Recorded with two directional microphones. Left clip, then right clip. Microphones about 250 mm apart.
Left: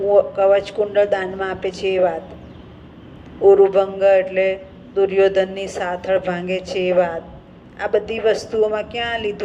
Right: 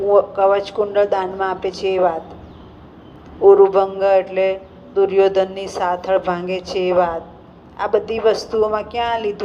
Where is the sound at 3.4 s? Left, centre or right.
Right.